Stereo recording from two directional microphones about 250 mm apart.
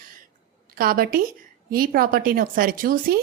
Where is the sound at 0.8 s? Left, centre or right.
Right.